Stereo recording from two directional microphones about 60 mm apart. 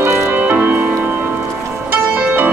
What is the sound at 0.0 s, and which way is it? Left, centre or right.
Music, right.